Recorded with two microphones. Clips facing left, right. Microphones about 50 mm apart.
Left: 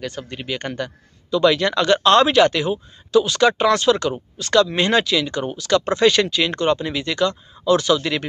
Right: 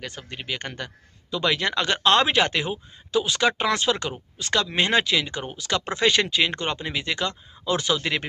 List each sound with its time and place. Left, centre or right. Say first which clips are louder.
0.0 s speech: left 6 dB; centre